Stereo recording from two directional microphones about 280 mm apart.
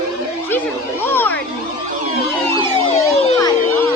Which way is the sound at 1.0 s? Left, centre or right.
Centre.